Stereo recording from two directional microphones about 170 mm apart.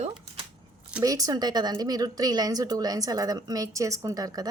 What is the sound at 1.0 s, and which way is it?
Speech, 20° right (ahead or behind).